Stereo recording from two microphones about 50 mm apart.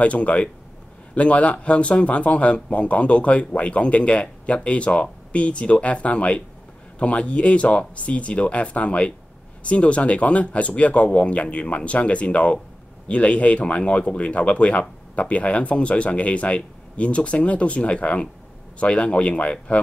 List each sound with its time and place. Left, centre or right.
0.0 s speech: left